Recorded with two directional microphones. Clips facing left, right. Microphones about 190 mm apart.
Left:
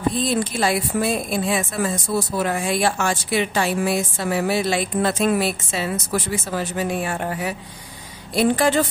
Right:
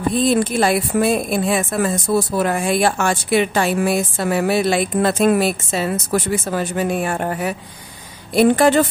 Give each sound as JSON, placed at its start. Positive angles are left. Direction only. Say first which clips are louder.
{"t": 0.2, "sound": "a woman's voice", "louder": "right 5 dB", "side_deg": -55}